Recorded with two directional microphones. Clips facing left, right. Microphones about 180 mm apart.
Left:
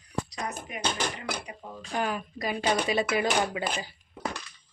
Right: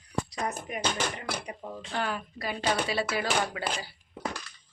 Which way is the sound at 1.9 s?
15° left (ahead or behind).